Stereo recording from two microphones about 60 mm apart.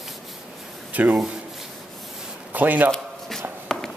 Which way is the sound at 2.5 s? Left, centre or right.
Right.